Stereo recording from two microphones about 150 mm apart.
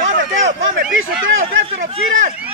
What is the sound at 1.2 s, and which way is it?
Speech, 40° right (ahead or behind).